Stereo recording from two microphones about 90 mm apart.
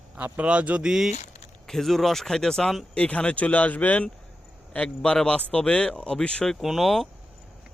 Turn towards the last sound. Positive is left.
turn(degrees=0)  # may be behind; listen again after turning